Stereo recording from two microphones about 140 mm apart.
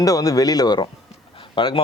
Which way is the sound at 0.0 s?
25° left (ahead or behind).